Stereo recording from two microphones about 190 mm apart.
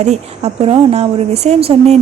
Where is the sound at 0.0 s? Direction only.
35° right (ahead or behind).